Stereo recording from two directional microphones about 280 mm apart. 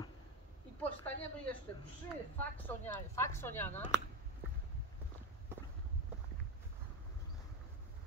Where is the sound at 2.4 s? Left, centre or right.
Centre.